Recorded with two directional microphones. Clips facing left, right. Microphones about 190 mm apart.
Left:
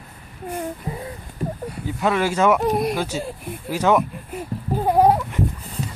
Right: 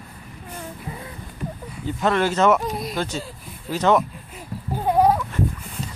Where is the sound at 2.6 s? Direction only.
60° left (ahead or behind).